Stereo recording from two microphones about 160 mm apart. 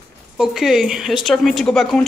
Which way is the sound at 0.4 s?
5° right (ahead or behind).